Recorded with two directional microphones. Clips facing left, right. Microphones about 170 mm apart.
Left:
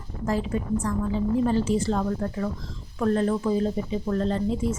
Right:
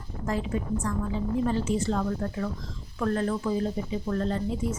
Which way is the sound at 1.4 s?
30° left (ahead or behind).